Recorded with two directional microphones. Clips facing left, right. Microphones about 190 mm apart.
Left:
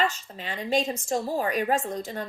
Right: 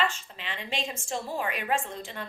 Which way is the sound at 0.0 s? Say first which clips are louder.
Left 3 dB; 40° left (ahead or behind).